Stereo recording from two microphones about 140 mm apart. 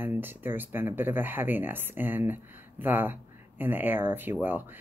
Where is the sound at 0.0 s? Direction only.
15° right (ahead or behind).